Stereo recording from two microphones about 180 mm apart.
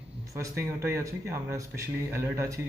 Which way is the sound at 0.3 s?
15° right (ahead or behind).